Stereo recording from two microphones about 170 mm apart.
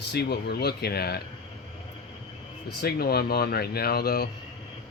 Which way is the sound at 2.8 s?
65° left (ahead or behind).